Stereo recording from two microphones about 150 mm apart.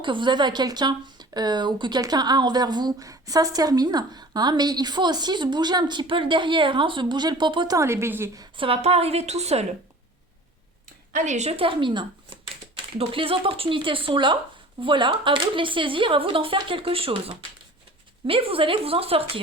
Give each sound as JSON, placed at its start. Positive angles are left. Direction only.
{"t": 0.0, "sound": "speech", "side_deg": -30}
{"t": 7.8, "sound": "a woman's voice", "side_deg": -15}
{"t": 8.5, "sound": "a woman's voice", "side_deg": -40}
{"t": 11.1, "sound": "speech", "side_deg": -55}